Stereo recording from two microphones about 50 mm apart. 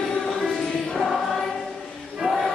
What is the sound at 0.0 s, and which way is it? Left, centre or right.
Music, centre.